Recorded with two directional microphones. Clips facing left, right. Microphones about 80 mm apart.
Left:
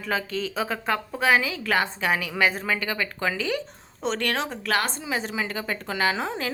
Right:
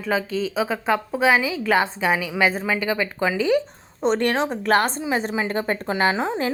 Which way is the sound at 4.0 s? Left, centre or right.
Right.